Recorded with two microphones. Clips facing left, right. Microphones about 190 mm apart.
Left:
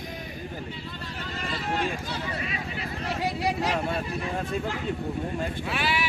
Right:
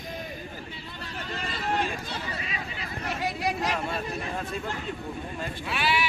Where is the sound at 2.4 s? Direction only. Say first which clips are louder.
Left 3 dB; 55° left (ahead or behind).